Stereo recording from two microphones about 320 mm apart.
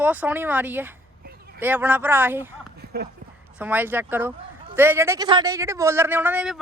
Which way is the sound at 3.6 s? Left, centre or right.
Centre.